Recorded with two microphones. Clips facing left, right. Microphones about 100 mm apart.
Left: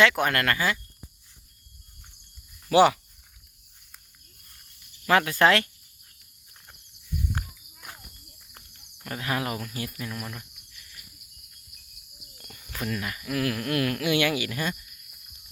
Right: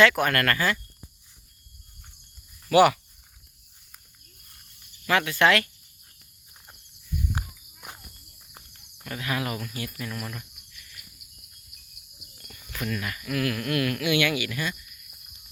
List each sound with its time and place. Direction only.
0.0 s speech: 20° left (ahead or behind)
2.6 s speech: 25° left (ahead or behind)
5.0 s speech: 35° left (ahead or behind)
7.3 s walk: 20° right (ahead or behind)
9.0 s speech: 35° left (ahead or behind)
10.0 s cricket: 15° left (ahead or behind)
12.5 s speech: 30° left (ahead or behind)